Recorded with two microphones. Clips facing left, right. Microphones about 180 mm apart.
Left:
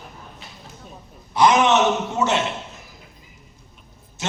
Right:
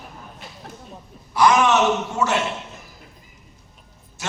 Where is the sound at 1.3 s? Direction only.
20° left (ahead or behind).